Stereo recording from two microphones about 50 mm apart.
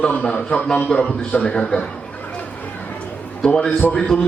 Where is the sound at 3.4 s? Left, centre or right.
Centre.